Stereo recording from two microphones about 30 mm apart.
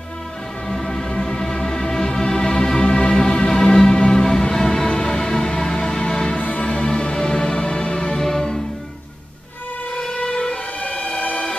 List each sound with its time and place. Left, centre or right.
0.7 s music: centre
6.3 s music: left
6.7 s music: left
10.1 s a sound: left
10.5 s emergency vehicle: left
11.1 s music: left